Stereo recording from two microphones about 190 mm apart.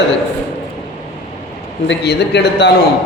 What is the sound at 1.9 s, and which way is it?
Speech, 65° left (ahead or behind).